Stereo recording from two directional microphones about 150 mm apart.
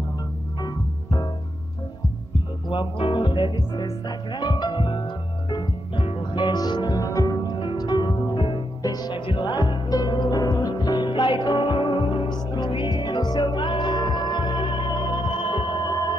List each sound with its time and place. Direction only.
0.6 s organ: 25° left (ahead or behind)
2.7 s music: 35° left (ahead or behind)